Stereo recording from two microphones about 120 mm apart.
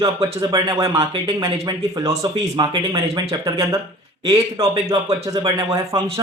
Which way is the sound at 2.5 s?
40° right (ahead or behind).